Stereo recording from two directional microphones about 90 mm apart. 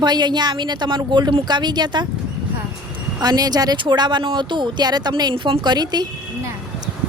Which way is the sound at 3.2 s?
45° right (ahead or behind).